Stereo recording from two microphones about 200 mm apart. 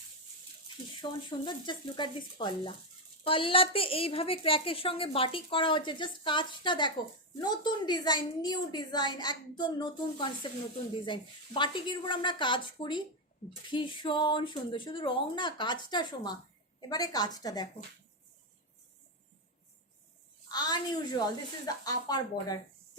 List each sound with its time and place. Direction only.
1.0 s a woman's voice: 25° left (ahead or behind)
20.5 s a woman's voice: 20° left (ahead or behind)